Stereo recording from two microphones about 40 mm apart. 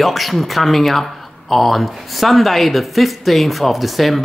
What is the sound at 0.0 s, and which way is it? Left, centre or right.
Speech, centre.